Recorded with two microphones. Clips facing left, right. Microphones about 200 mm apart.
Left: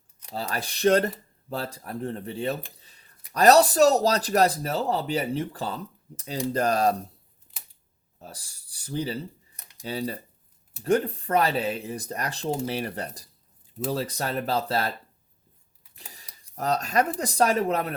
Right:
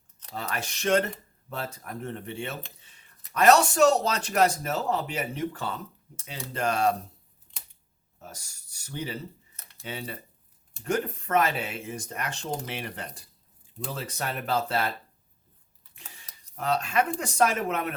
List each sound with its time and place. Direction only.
0.3 s speech: 35° left (ahead or behind)
2.8 s a sound: 35° left (ahead or behind)
3.3 s speech: 35° left (ahead or behind)
7.5 s camera: 5° left (ahead or behind)
8.2 s speech: 30° left (ahead or behind)
9.6 s a sound: 15° left (ahead or behind)
9.8 s speech: 35° left (ahead or behind)
16.6 s speech: 40° left (ahead or behind)